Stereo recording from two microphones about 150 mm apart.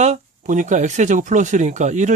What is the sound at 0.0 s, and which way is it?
Speech, 50° right (ahead or behind).